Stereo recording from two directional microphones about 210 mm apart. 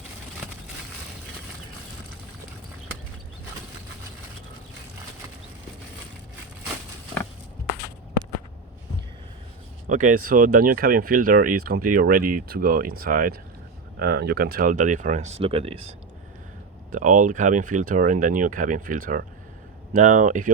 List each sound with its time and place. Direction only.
9.8 s speech: 35° right (ahead or behind)